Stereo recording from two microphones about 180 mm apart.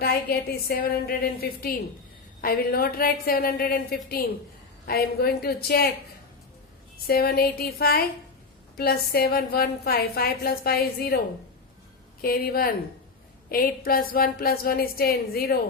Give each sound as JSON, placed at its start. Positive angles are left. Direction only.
{"t": 0.0, "sound": "a woman's voice", "side_deg": 60}
{"t": 7.1, "sound": "a woman's voice", "side_deg": 60}
{"t": 12.2, "sound": "a woman's voice", "side_deg": 55}